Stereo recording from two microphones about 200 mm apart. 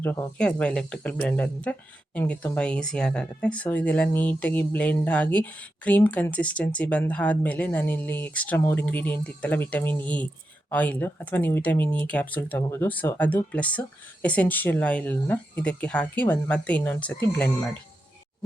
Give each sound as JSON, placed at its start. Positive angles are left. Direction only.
{"t": 0.0, "sound": "speech", "side_deg": 10}